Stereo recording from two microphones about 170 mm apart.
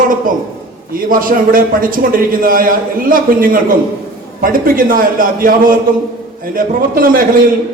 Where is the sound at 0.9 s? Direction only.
55° right (ahead or behind).